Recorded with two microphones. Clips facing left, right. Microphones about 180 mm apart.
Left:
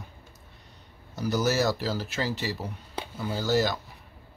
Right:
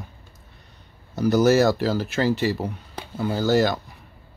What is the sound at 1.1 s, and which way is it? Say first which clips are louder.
Speech: right 8 dB; 55° right (ahead or behind).